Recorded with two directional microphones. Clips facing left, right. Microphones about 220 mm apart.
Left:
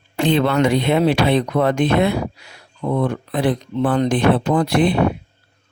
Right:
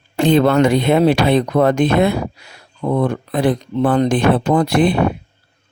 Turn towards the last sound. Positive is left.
turn(degrees=-45)  # may be behind; listen again after turning